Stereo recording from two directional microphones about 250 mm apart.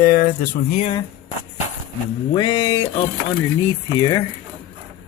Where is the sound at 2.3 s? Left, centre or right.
Centre.